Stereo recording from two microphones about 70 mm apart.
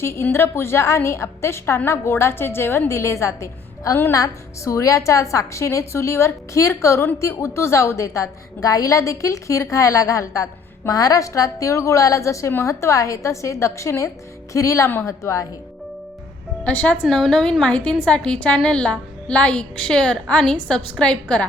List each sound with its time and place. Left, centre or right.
0.0 s a woman's voice: left
16.6 s a woman's voice: centre